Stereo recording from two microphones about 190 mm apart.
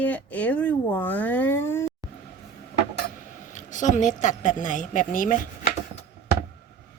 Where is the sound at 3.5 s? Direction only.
40° left (ahead or behind).